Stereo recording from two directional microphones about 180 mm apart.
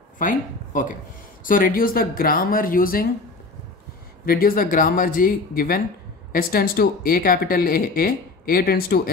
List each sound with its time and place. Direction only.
0.2 s speech: 45° left (ahead or behind)
4.3 s speech: 55° left (ahead or behind)